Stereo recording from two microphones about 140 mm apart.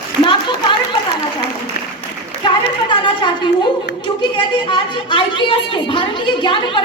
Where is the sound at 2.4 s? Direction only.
35° left (ahead or behind).